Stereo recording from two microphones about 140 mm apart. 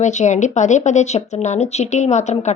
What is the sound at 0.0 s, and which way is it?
A woman's voice, 60° left (ahead or behind).